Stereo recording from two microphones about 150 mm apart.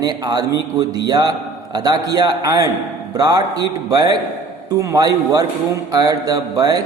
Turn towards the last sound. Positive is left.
turn(degrees=-25)  # may be behind; listen again after turning